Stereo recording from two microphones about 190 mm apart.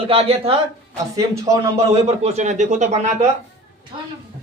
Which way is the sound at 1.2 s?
15° right (ahead or behind).